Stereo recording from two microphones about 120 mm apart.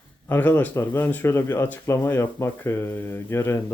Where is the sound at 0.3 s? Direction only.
15° left (ahead or behind).